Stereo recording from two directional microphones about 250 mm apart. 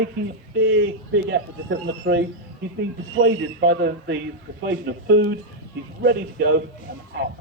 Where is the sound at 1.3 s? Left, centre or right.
Right.